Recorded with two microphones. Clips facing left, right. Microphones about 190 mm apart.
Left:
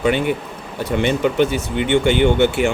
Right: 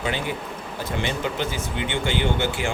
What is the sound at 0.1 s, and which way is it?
Speech, 60° left (ahead or behind).